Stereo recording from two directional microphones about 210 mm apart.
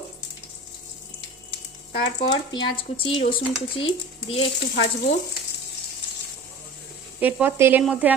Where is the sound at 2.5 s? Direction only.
20° left (ahead or behind).